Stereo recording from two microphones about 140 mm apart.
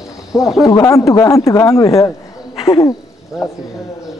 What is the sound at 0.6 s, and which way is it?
Speech, 20° left (ahead or behind).